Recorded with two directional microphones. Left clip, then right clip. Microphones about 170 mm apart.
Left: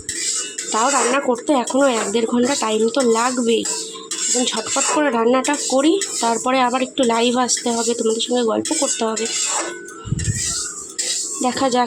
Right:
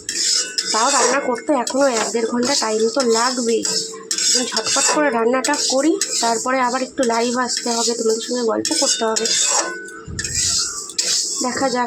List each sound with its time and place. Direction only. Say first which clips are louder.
0.7 s speech: even; 15° left (ahead or behind)
4.7 s speech: right 2 dB; 15° left (ahead or behind)
11.4 s speech: left 4 dB; 15° left (ahead or behind)